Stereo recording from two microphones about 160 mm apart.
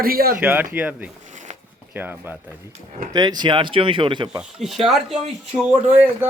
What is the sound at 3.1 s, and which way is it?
Speech, 25° right (ahead or behind).